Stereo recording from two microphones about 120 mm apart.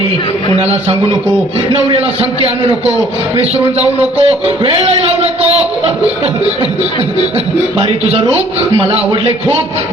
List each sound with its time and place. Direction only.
2.4 s a man's voice: 55° right (ahead or behind)
7.8 s a man's voice: 60° right (ahead or behind)